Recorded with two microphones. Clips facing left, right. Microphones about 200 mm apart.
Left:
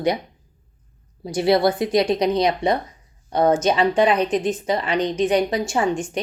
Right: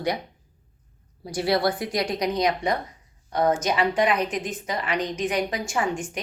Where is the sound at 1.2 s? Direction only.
25° left (ahead or behind).